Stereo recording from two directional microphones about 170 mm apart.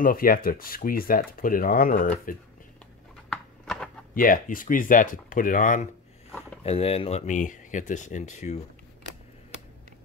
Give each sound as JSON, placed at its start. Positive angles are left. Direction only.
{"t": 0.0, "sound": "speech", "side_deg": 60}
{"t": 3.3, "sound": "a sound", "side_deg": 5}
{"t": 4.1, "sound": "speech", "side_deg": 55}
{"t": 6.6, "sound": "speech", "side_deg": 35}